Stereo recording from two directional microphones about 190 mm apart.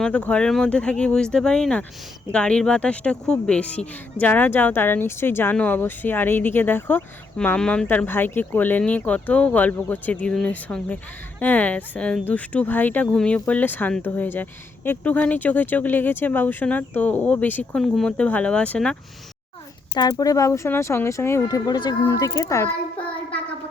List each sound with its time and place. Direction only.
0.0 s speech: 5° left (ahead or behind)
19.9 s speech: 20° left (ahead or behind)